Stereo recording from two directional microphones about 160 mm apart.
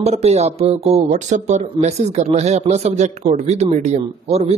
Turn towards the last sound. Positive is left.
turn(degrees=-45)  # may be behind; listen again after turning